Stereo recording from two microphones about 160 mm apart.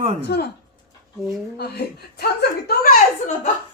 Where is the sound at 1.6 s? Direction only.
90° left; by 3.3 s 65° left (ahead or behind).